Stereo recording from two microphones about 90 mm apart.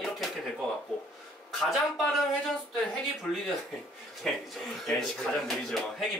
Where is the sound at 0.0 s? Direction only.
Centre (ahead or behind).